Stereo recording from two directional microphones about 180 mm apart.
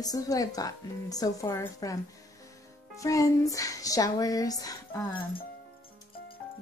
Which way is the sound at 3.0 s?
20° left (ahead or behind).